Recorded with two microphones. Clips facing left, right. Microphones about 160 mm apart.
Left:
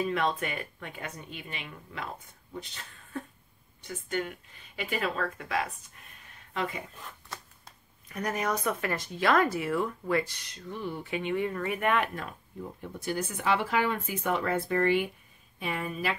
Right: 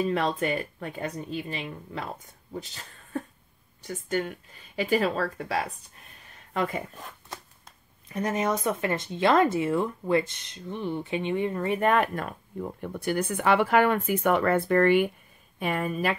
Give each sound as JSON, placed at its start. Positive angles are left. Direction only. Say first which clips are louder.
{"t": 0.0, "sound": "speech", "louder": "right 3 dB", "side_deg": -35}
{"t": 6.5, "sound": "speech", "louder": "right 5 dB", "side_deg": -50}
{"t": 8.1, "sound": "speech", "louder": "right 4 dB", "side_deg": -25}